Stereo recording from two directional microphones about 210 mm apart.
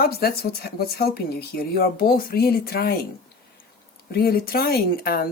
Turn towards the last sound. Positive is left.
turn(degrees=45)  # may be behind; listen again after turning